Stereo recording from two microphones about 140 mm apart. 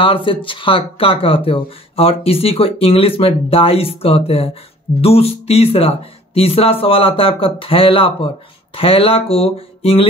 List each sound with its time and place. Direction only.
0.0 s speech: 40° left (ahead or behind)